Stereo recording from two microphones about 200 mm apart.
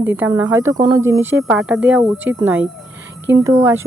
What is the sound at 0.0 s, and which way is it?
Speech, 10° right (ahead or behind).